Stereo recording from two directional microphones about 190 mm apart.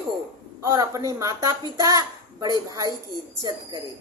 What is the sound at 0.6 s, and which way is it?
A woman's voice, 20° right (ahead or behind).